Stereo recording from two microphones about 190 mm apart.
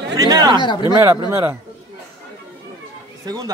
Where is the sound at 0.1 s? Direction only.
20° right (ahead or behind).